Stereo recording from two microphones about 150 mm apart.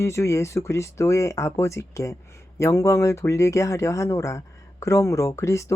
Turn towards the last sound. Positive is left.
turn(degrees=20)  # may be behind; listen again after turning